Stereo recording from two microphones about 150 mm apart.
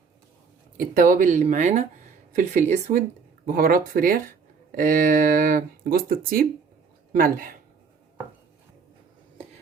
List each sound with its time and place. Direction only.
0.9 s a woman's voice: 60° right (ahead or behind)
3.4 s speech: 75° right (ahead or behind)
7.2 s speech: 70° right (ahead or behind)